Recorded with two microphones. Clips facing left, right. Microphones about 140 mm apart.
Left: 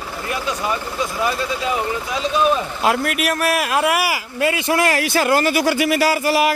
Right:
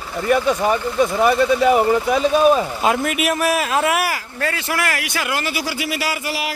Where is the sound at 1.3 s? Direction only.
55° right (ahead or behind).